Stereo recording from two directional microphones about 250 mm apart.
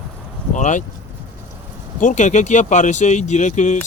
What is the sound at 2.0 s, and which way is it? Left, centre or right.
Speech, left.